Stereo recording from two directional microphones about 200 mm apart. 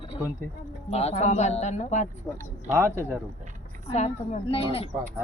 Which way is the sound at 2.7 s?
15° right (ahead or behind).